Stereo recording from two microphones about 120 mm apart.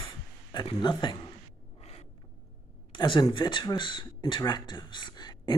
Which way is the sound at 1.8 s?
60° left (ahead or behind).